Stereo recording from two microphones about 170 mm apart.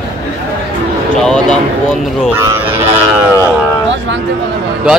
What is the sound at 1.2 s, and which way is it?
Speech, 5° left (ahead or behind).